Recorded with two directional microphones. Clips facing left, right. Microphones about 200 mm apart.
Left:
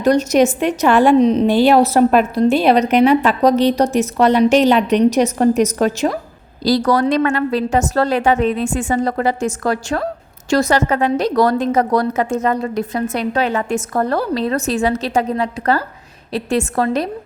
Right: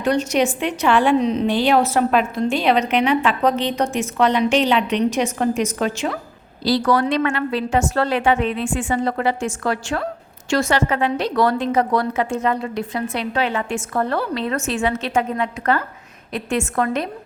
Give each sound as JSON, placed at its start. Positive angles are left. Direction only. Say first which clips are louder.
{"t": 0.0, "sound": "a woman's voice", "louder": "left 5 dB", "side_deg": 40}